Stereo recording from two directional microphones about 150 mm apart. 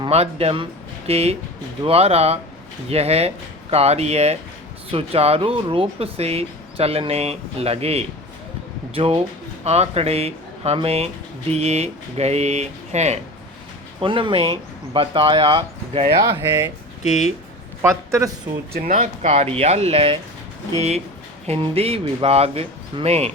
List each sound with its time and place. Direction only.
0.0 s speech: 45° right (ahead or behind)
14.0 s speech: 35° right (ahead or behind)
16.1 s speech: 25° right (ahead or behind)
18.9 s speech: 45° right (ahead or behind)
21.4 s speech: 40° right (ahead or behind)